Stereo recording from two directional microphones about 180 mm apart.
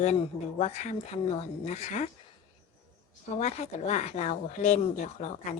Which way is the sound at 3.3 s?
40° left (ahead or behind).